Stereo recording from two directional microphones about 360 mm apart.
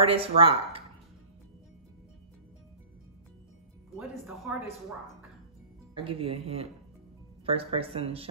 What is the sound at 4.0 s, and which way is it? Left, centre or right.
Music, centre.